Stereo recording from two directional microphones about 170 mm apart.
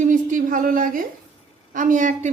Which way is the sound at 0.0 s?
50° right (ahead or behind).